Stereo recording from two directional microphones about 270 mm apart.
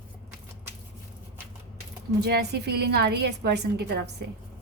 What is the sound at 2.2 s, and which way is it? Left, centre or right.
A woman's voice, right.